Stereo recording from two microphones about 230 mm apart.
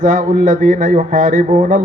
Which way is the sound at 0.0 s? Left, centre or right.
Right.